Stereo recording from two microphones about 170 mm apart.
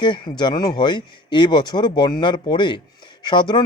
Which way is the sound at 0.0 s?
25° left (ahead or behind).